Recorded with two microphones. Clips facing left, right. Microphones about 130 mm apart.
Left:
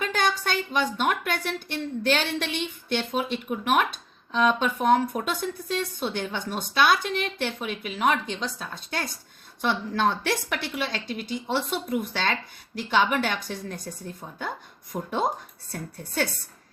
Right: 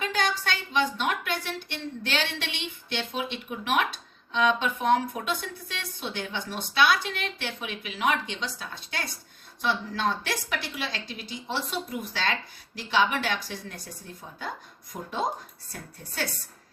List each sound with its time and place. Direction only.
0.0 s a woman's voice: 50° left (ahead or behind)